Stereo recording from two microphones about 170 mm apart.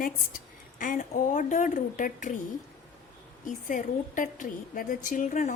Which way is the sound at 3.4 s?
50° left (ahead or behind).